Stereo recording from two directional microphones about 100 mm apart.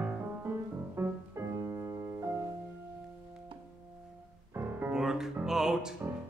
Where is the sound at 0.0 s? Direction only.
20° right (ahead or behind).